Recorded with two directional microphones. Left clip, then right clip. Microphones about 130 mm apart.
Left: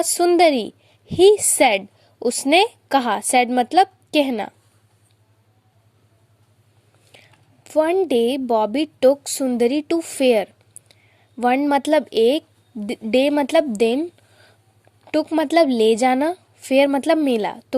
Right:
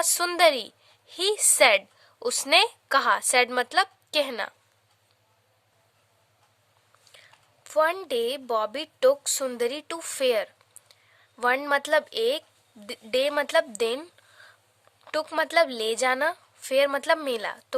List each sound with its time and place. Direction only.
0.0 s a woman's voice: centre (ahead or behind)
7.1 s a sound: 20° left (ahead or behind)
8.0 s a woman's voice: 20° left (ahead or behind)
15.4 s a woman's voice: 20° left (ahead or behind)